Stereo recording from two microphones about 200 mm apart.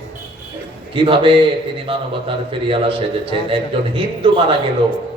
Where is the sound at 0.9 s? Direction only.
25° right (ahead or behind).